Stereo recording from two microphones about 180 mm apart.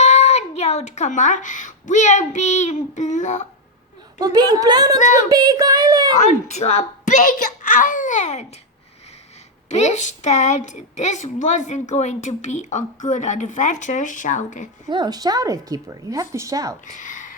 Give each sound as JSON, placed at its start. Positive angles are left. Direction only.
{"t": 0.0, "sound": "speech", "side_deg": 35}
{"t": 4.2, "sound": "a woman's voice", "side_deg": -20}
{"t": 4.9, "sound": "speech", "side_deg": 45}
{"t": 5.3, "sound": "a woman's voice", "side_deg": -20}
{"t": 6.5, "sound": "a child's voice", "side_deg": 35}
{"t": 9.6, "sound": "a woman's voice", "side_deg": 40}
{"t": 14.8, "sound": "a woman's voice", "side_deg": -25}
{"t": 16.8, "sound": "a sound", "side_deg": 45}